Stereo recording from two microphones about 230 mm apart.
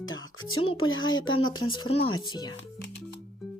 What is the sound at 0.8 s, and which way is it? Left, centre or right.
Speech, left.